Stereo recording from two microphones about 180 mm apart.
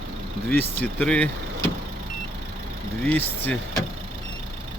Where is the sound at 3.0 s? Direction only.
10° left (ahead or behind).